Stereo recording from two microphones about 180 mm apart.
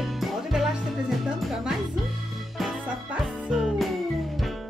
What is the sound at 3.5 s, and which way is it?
Music, centre (ahead or behind).